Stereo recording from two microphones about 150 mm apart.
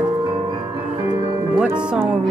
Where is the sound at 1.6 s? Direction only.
15° right (ahead or behind).